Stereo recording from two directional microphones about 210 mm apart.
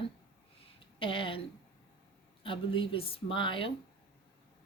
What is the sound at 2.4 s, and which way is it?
A woman's voice, 25° left (ahead or behind).